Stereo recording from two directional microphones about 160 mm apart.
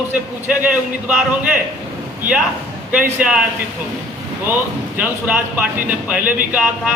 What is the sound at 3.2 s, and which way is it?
Speech, 10° right (ahead or behind).